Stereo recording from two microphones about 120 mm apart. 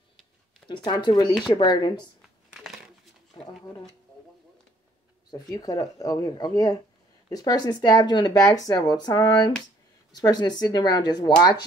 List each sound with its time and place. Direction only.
0.7 s speech: 40° left (ahead or behind)
5.3 s speech: 35° left (ahead or behind)